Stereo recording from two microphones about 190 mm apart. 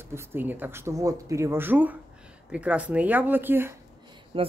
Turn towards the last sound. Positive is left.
turn(degrees=-30)  # may be behind; listen again after turning